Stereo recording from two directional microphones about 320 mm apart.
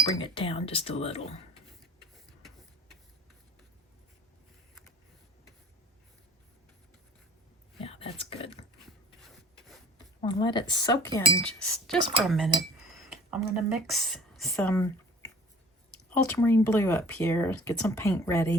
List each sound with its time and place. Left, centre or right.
0.1 s speech: centre
1.8 s printer: centre
7.8 s speech: centre
10.2 s speech: centre